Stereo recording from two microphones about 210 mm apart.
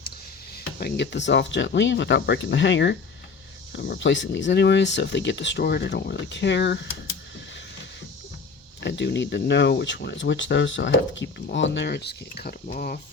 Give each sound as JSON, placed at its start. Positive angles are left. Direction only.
{"t": 0.5, "sound": "speech", "side_deg": 50}
{"t": 8.8, "sound": "speech", "side_deg": 55}